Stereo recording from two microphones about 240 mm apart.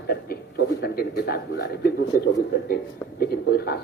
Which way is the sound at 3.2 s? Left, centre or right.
Left.